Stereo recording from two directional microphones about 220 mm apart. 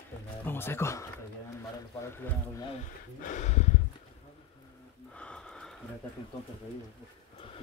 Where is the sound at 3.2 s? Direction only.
35° left (ahead or behind).